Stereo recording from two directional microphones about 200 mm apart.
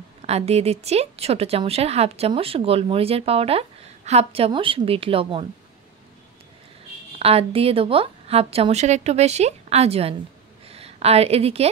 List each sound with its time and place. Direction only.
0.2 s speech: 30° right (ahead or behind)
7.2 s a woman's voice: 30° right (ahead or behind)